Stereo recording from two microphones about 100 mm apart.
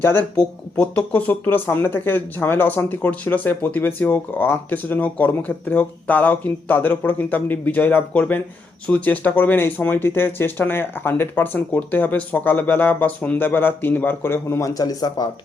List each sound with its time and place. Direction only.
0.0 s speech: 20° left (ahead or behind)
14.7 s speech: 40° left (ahead or behind)